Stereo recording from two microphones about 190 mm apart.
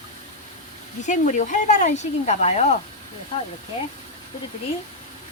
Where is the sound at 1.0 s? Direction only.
40° left (ahead or behind).